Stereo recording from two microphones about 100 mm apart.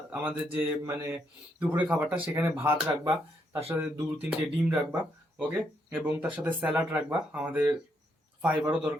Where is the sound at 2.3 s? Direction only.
25° right (ahead or behind).